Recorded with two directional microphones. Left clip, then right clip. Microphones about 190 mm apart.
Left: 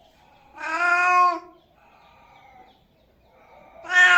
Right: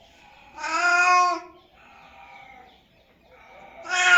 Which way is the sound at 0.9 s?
10° left (ahead or behind).